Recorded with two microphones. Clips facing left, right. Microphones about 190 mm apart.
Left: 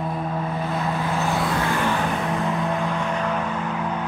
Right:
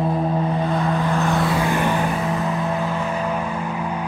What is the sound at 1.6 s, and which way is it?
Vehicle, 15° right (ahead or behind).